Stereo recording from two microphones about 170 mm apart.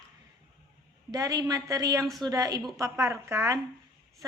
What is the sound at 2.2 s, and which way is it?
A woman's voice, 20° right (ahead or behind).